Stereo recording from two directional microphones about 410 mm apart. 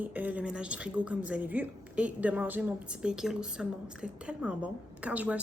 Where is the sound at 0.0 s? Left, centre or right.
Centre.